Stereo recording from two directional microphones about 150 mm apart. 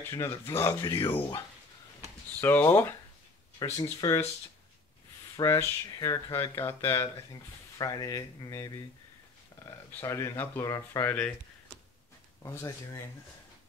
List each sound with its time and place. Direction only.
0.0 s speech: 20° left (ahead or behind)
0.8 s speech: 30° left (ahead or behind)
2.4 s speech: 15° left (ahead or behind)
5.3 s speech: 20° left (ahead or behind)
9.8 s speech: 15° left (ahead or behind)
12.4 s speech: 20° left (ahead or behind)